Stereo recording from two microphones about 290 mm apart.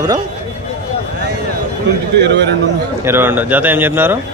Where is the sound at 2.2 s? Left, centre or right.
Right.